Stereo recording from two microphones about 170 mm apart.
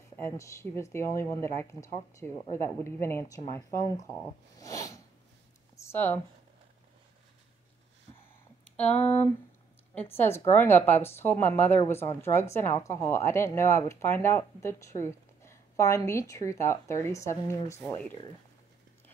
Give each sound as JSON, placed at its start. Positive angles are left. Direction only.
{"t": 0.1, "sound": "a woman's voice", "side_deg": 15}
{"t": 8.7, "sound": "a woman's voice", "side_deg": 5}